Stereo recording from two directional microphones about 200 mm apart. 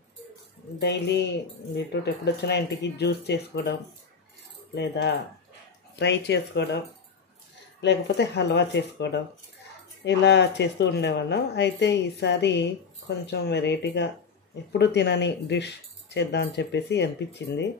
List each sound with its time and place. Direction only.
0.7 s speech: 55° left (ahead or behind)
4.7 s speech: 60° left (ahead or behind)
7.8 s speech: 60° left (ahead or behind)